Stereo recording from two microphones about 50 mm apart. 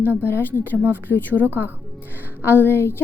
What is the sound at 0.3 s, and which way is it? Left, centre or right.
Speech, left.